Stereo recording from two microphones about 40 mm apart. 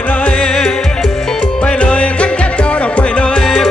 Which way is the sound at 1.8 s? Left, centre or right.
Left.